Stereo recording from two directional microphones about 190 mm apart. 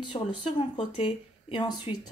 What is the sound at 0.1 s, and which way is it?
Speech, 25° left (ahead or behind).